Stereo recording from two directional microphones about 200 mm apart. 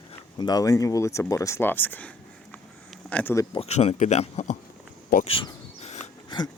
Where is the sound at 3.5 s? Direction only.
30° left (ahead or behind).